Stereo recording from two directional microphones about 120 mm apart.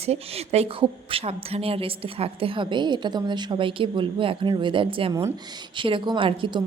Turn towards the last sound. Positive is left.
turn(degrees=-45)  # may be behind; listen again after turning